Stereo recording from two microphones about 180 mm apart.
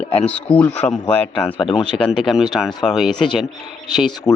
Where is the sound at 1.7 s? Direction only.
Centre (ahead or behind).